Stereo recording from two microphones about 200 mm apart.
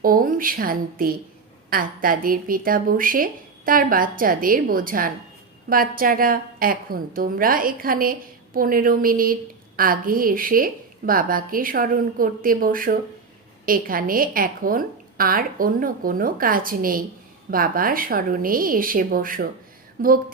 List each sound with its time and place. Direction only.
0.0 s a woman's voice: 45° right (ahead or behind)